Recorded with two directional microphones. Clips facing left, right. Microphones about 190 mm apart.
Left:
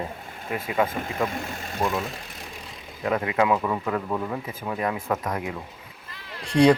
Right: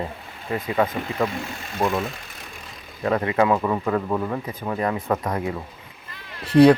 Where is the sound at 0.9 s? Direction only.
45° left (ahead or behind).